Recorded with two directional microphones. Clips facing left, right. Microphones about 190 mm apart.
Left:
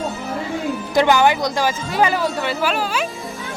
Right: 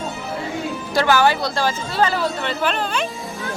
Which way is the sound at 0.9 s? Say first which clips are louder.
Left 2 dB; 20° left (ahead or behind).